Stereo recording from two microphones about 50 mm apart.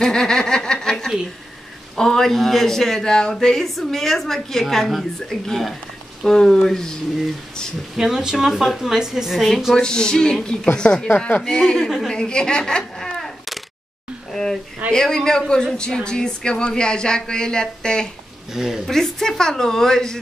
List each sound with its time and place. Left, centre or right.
0.0 s snicker: centre
2.0 s speech: centre
7.9 s speech: centre
9.8 s a woman's voice: centre
14.3 s speech: centre
18.5 s speech: centre
18.9 s speech: centre